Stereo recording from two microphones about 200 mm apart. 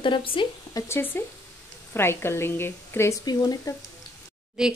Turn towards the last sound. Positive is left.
turn(degrees=-5)  # may be behind; listen again after turning